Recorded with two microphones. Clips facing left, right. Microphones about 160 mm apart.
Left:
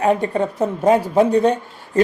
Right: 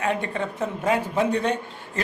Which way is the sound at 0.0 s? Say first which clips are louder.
Left 8 dB; 40° left (ahead or behind).